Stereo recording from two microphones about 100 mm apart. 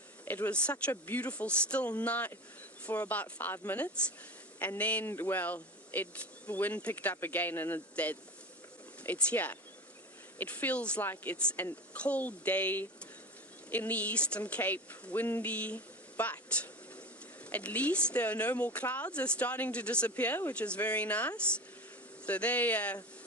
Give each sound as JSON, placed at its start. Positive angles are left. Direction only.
{"t": 0.3, "sound": "speech", "side_deg": 15}
{"t": 4.8, "sound": "speech", "side_deg": 15}